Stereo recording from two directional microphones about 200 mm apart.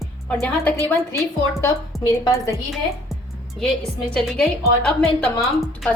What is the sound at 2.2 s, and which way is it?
Speech, 15° left (ahead or behind).